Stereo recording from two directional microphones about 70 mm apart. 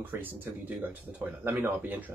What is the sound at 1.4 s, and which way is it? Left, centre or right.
Speech, right.